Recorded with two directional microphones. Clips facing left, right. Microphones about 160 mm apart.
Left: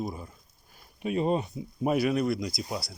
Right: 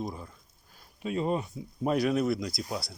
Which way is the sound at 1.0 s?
20° left (ahead or behind).